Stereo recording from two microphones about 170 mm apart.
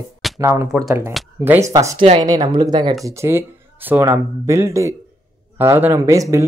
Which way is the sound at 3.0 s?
15° right (ahead or behind).